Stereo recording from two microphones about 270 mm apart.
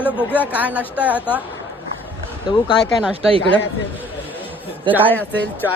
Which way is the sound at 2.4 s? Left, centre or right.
Centre.